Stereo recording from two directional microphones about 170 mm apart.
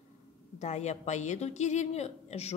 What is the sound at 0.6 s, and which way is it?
A woman's voice, 40° left (ahead or behind).